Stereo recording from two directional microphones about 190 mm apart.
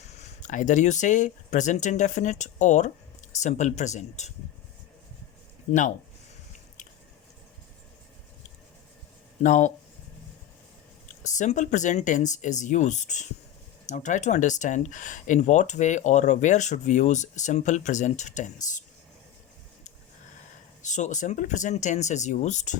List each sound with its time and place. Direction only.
0.4 s speech: 40° left (ahead or behind)
9.4 s speech: 40° left (ahead or behind)
11.2 s speech: 40° left (ahead or behind)
20.8 s speech: 40° left (ahead or behind)